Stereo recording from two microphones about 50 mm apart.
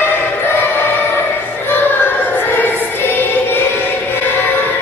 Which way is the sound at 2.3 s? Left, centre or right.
Left.